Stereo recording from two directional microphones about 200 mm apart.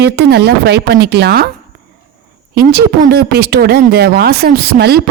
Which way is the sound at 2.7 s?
50° right (ahead or behind).